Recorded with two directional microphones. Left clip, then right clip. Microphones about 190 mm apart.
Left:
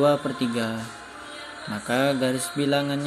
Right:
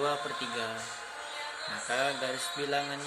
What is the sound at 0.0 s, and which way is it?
Speech, 35° left (ahead or behind).